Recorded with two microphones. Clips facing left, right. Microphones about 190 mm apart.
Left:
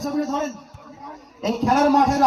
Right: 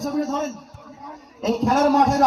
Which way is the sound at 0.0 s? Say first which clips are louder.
Even; centre (ahead or behind).